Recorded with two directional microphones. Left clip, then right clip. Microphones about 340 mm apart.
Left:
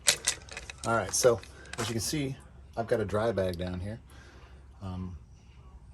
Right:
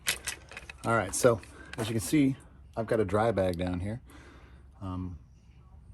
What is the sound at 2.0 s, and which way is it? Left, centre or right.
A man's voice, right.